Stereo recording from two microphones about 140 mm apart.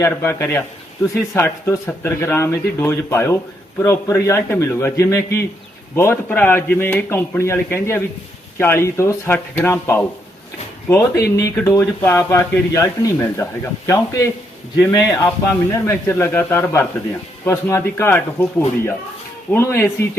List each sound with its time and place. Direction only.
0.0 s speech: 20° left (ahead or behind)
19.5 s speech: 15° left (ahead or behind)